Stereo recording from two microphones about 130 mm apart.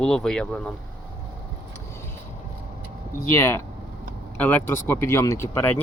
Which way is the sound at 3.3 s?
20° left (ahead or behind).